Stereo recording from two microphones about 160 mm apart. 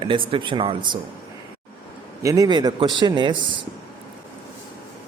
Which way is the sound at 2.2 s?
20° right (ahead or behind).